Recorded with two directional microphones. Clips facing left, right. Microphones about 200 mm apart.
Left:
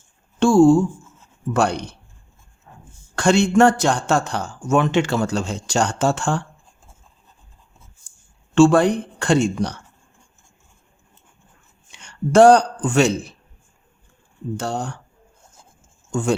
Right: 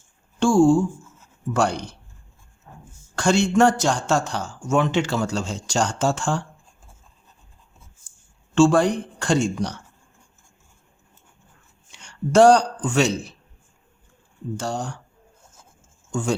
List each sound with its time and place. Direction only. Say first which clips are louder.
0.3 s a sound: left 3 dB; 60° left (ahead or behind)
1.5 s speech: left 2 dB; 60° left (ahead or behind)
3.2 s speech: left 3 dB; 60° left (ahead or behind)
8.5 s speech: left 3 dB; 60° left (ahead or behind)
11.9 s speech: left 3 dB; 60° left (ahead or behind)
14.5 s speech: left 2 dB; 60° left (ahead or behind)